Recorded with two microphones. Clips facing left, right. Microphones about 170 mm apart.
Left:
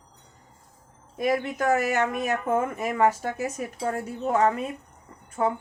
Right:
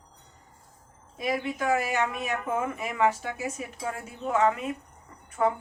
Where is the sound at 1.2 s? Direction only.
50° left (ahead or behind); by 5.5 s 30° left (ahead or behind).